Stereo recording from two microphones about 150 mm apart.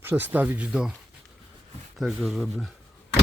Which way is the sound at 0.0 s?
15° right (ahead or behind).